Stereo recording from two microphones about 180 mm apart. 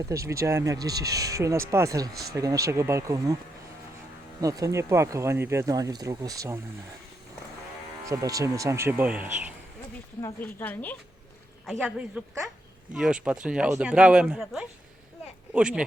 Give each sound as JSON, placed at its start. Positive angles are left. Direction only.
{"t": 0.1, "sound": "speech", "side_deg": -15}
{"t": 4.4, "sound": "speech", "side_deg": -20}
{"t": 8.0, "sound": "speech", "side_deg": -20}
{"t": 10.2, "sound": "a woman's voice", "side_deg": 15}